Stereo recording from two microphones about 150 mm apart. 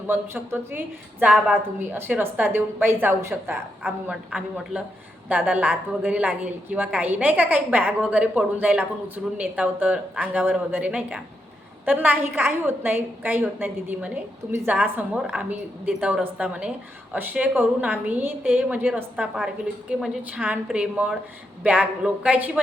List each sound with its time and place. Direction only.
0.1 s a woman's voice: 15° right (ahead or behind)